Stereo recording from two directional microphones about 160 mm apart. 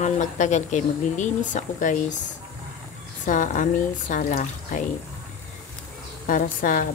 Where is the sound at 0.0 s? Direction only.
50° left (ahead or behind).